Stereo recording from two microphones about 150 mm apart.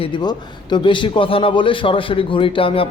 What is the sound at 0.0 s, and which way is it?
A man's voice, 30° left (ahead or behind).